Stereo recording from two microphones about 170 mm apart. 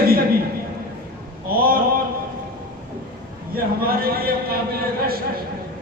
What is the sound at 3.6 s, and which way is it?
A man's voice, 60° right (ahead or behind).